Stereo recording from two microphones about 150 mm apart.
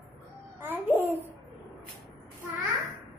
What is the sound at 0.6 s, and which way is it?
Babbling, 15° right (ahead or behind).